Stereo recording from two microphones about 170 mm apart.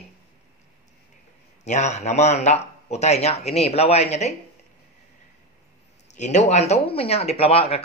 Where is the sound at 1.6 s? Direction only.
45° left (ahead or behind).